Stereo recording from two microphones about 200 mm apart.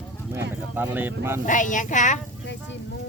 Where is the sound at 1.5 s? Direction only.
40° left (ahead or behind).